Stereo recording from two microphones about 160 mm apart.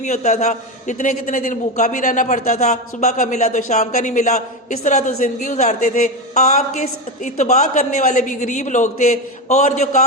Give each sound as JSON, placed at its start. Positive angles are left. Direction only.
{"t": 0.0, "sound": "a man's voice", "side_deg": 45}